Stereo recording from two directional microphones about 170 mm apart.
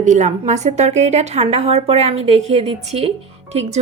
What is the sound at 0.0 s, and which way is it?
A woman's voice, 45° right (ahead or behind).